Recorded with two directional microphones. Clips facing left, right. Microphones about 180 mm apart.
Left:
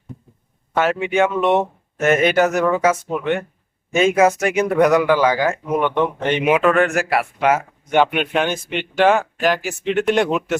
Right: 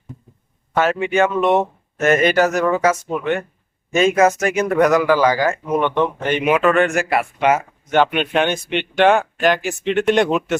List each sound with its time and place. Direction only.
0.8 s speech: 5° left (ahead or behind)
5.9 s speech: 20° left (ahead or behind)